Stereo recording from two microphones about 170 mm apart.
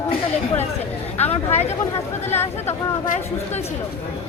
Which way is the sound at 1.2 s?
40° left (ahead or behind).